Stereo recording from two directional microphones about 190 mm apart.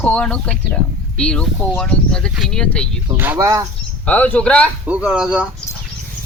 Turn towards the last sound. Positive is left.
turn(degrees=-5)  # may be behind; listen again after turning